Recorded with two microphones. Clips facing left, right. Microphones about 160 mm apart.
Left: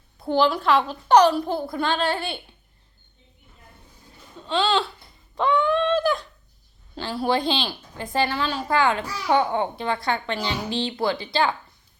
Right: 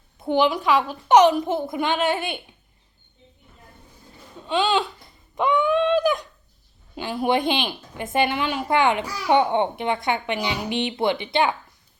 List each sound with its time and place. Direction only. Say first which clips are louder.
0.2 s a woman's voice: right 1 dB; 15° right (ahead or behind)
4.4 s a woman's voice: right 1 dB; 15° right (ahead or behind)
5.3 s a sound: right 1 dB; 15° right (ahead or behind)
6.9 s a woman's voice: right 2 dB; 15° right (ahead or behind)